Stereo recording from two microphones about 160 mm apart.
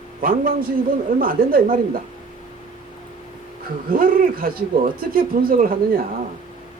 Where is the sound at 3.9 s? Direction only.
60° right (ahead or behind).